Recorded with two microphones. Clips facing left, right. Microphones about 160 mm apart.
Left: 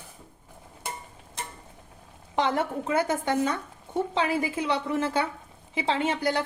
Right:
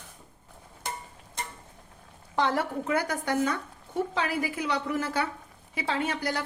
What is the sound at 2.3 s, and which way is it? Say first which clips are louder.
A woman's voice: left 1 dB; 20° left (ahead or behind).